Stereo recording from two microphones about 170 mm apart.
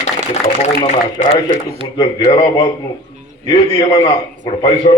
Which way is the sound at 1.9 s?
25° left (ahead or behind).